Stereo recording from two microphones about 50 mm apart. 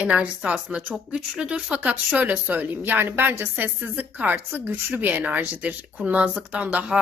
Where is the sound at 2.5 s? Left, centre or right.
Right.